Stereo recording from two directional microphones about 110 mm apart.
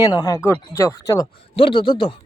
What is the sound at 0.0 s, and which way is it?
Speech, 35° left (ahead or behind).